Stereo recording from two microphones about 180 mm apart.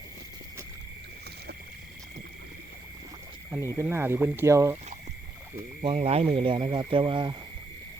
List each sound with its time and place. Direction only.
3.5 s speech: 15° right (ahead or behind)
5.8 s speech: 35° right (ahead or behind)